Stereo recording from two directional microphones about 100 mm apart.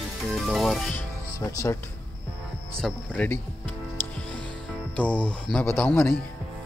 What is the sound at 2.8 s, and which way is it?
Speech, 15° left (ahead or behind).